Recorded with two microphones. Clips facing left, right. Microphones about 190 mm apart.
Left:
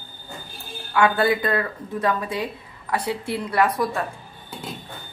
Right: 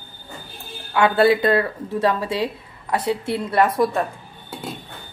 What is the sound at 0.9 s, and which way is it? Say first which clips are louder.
Speech: right 3 dB; 25° right (ahead or behind).